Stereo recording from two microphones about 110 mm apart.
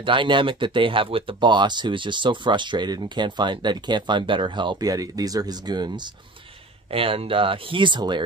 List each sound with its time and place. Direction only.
0.0 s speech: 50° right (ahead or behind)
6.9 s speech: 60° right (ahead or behind)